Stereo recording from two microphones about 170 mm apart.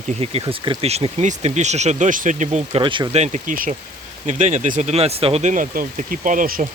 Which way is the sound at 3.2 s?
45° right (ahead or behind).